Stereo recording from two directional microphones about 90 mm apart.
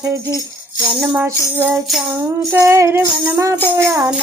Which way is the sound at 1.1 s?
25° right (ahead or behind).